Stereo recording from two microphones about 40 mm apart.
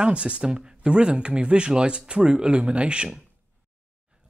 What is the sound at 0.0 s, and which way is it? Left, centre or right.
Speech, right.